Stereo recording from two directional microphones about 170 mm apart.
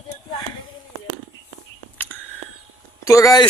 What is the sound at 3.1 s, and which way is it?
Speech, 20° left (ahead or behind).